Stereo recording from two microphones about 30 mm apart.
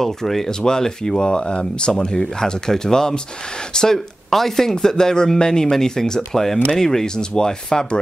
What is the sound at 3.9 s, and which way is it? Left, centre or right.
Speech, centre.